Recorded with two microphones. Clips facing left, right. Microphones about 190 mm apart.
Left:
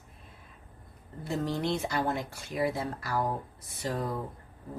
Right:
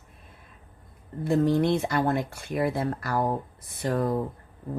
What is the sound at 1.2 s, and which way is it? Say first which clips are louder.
Speech: right 9 dB; 55° right (ahead or behind).